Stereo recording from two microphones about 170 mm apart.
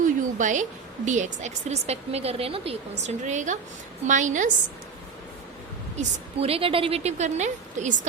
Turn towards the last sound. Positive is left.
turn(degrees=-45)  # may be behind; listen again after turning